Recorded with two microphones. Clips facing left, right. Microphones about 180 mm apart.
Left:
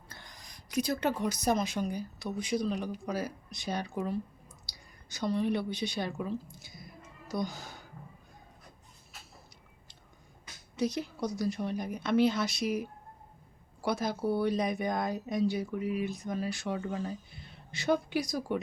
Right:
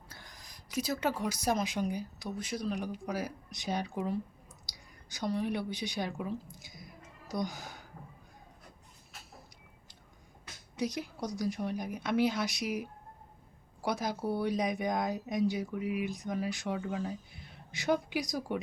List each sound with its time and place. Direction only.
0.1 s speech: 5° right (ahead or behind)
2.4 s speech: 5° right (ahead or behind)
10.8 s speech: 15° right (ahead or behind)
16.8 s speech: 5° right (ahead or behind)